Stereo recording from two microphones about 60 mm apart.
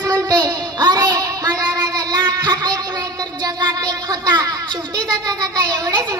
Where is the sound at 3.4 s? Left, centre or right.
Right.